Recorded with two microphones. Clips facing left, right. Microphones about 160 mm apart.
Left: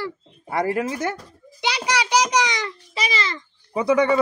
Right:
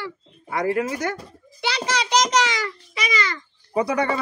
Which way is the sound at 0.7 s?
25° left (ahead or behind).